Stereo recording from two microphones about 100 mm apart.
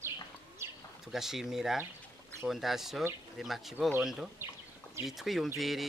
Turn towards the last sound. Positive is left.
turn(degrees=0)  # may be behind; listen again after turning